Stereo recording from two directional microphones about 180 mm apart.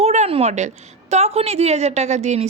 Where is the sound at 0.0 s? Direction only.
35° right (ahead or behind).